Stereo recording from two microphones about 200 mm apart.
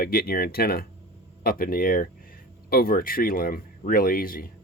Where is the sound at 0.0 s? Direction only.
50° left (ahead or behind).